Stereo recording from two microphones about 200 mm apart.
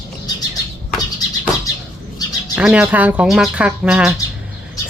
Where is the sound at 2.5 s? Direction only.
5° right (ahead or behind).